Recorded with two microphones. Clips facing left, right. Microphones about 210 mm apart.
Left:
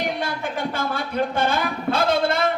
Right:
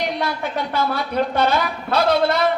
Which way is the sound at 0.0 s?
50° left (ahead or behind).